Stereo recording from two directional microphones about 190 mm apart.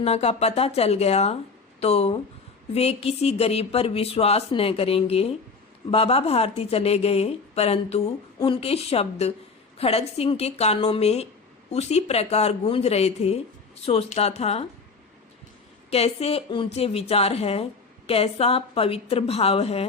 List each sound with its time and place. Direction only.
0.0 s a woman's voice: 35° left (ahead or behind)
15.9 s a woman's voice: 30° left (ahead or behind)